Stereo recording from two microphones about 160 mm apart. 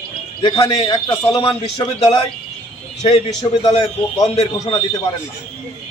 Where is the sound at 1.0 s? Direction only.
15° left (ahead or behind).